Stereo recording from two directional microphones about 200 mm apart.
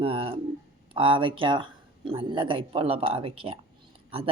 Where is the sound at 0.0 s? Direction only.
30° right (ahead or behind).